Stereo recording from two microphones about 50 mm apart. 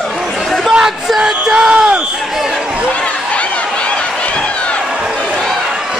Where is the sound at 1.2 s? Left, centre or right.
Centre.